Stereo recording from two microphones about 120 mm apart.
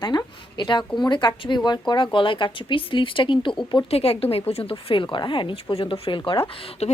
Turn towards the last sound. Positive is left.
turn(degrees=50)  # may be behind; listen again after turning